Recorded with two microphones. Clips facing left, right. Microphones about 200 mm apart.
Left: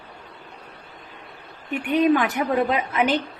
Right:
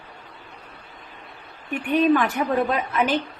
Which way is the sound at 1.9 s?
15° left (ahead or behind).